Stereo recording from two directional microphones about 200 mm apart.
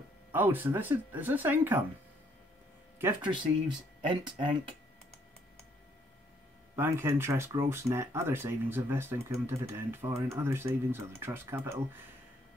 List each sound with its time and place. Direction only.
0.3 s speech: 10° right (ahead or behind)
3.0 s speech: 10° right (ahead or behind)
4.4 s speech: 25° right (ahead or behind)
6.7 s speech: 15° right (ahead or behind)